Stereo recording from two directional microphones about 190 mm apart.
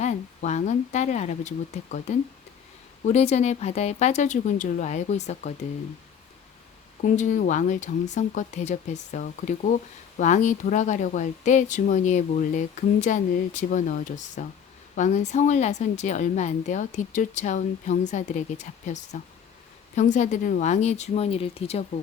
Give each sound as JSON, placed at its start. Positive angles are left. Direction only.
{"t": 0.0, "sound": "a sound", "side_deg": 35}
{"t": 0.9, "sound": "speech", "side_deg": 40}
{"t": 7.0, "sound": "speech", "side_deg": 40}